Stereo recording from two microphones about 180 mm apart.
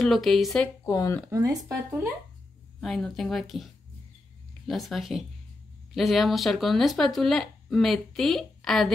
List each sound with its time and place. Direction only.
0.0 s speech: centre (ahead or behind)
0.8 s speech: 20° left (ahead or behind)
1.3 s speech: 15° right (ahead or behind)
2.8 s speech: centre (ahead or behind)